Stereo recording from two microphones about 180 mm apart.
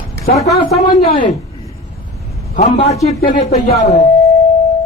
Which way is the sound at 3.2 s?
55° left (ahead or behind).